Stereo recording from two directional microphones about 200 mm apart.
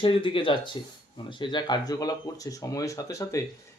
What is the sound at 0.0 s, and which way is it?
Speech, 25° left (ahead or behind).